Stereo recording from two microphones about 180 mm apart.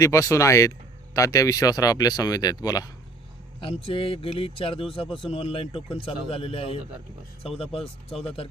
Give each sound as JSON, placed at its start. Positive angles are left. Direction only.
{"t": 0.0, "sound": "speech", "side_deg": 15}
{"t": 3.6, "sound": "speech", "side_deg": 30}